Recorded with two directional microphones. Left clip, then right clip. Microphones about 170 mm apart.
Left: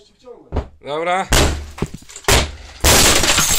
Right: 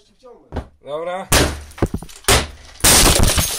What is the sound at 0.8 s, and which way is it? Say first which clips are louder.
Speech: left 6 dB; 20° left (ahead or behind).